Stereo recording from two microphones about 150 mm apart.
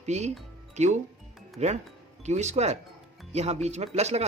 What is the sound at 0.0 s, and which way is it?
Speech, 50° right (ahead or behind).